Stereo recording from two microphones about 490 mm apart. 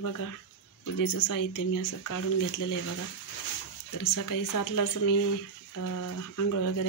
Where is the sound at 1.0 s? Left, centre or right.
Left.